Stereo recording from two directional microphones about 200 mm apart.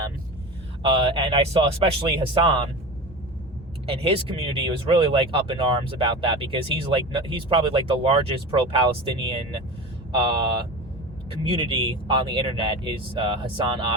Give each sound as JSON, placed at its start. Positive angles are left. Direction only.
{"t": 0.8, "sound": "speech", "side_deg": -25}
{"t": 3.8, "sound": "speech", "side_deg": -30}